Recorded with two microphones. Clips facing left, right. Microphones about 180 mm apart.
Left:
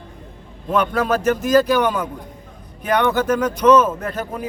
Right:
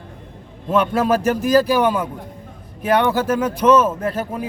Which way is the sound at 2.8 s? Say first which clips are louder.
Right 1 dB; 30° right (ahead or behind).